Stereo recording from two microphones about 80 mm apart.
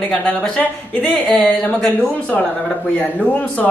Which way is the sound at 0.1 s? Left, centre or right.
Centre.